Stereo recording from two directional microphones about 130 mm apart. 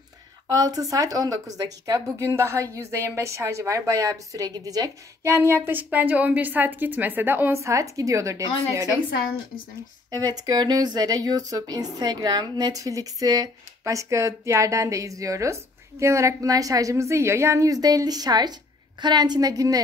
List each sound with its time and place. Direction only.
0.5 s a woman's voice: 30° right (ahead or behind)
10.1 s a woman's voice: 30° right (ahead or behind)